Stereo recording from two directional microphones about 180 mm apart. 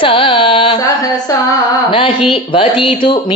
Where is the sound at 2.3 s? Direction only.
30° left (ahead or behind).